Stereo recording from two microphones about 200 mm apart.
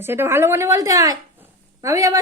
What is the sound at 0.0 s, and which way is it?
Speech, 10° right (ahead or behind).